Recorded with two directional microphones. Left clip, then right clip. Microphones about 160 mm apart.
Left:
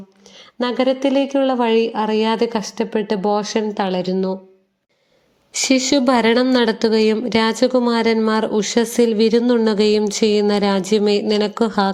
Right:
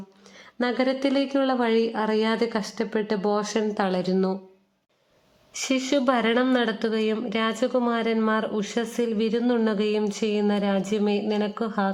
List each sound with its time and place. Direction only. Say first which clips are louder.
0.6 s a woman's voice: left 6 dB; 10° left (ahead or behind)
5.5 s speech: left 8 dB; 25° left (ahead or behind)